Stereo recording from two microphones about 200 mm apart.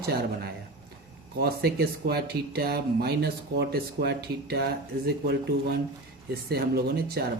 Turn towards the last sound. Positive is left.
turn(degrees=-50)  # may be behind; listen again after turning